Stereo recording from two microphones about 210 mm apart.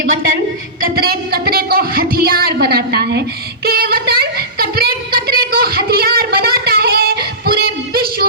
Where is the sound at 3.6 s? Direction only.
45° right (ahead or behind).